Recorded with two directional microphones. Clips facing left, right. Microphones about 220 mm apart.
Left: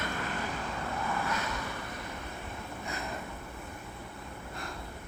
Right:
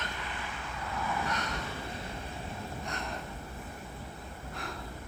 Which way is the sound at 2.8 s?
5° left (ahead or behind).